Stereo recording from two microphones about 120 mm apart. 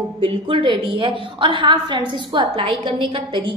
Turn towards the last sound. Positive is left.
turn(degrees=-45)  # may be behind; listen again after turning